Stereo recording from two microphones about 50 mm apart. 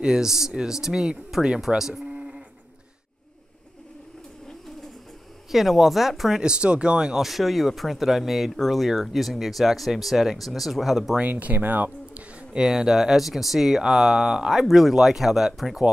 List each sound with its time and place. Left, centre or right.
0.0 s speech: centre
5.5 s speech: centre
6.4 s speech: centre
7.2 s speech: centre
11.1 s speech: right
12.4 s speech: centre